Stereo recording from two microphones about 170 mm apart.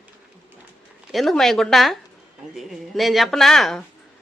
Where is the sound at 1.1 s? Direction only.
Centre (ahead or behind).